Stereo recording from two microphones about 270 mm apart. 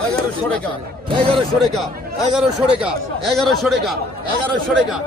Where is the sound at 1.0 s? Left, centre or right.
Centre.